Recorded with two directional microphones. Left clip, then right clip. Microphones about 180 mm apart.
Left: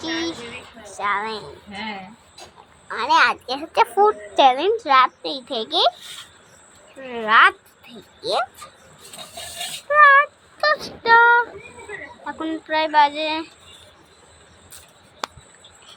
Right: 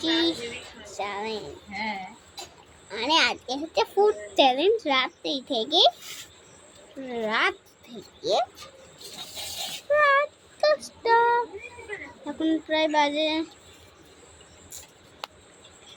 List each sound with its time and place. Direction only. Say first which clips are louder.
0.2 s a sound: right 2 dB; 5° right (ahead or behind)
0.9 s a woman's voice: left 8 dB; 10° right (ahead or behind)
2.9 s a woman's voice: left 6 dB; 10° right (ahead or behind)
7.1 s speech: left 11 dB; 15° right (ahead or behind)
9.9 s child singing: left 8 dB; 10° right (ahead or behind)
11.9 s a woman's voice: left 5 dB; 15° right (ahead or behind)